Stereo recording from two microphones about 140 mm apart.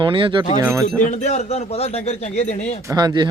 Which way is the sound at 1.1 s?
55° left (ahead or behind).